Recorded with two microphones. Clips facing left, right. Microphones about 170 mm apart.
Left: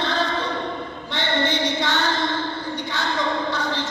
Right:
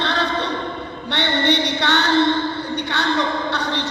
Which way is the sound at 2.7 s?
70° right (ahead or behind).